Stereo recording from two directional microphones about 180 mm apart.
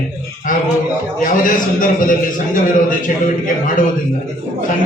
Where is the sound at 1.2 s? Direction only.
50° left (ahead or behind).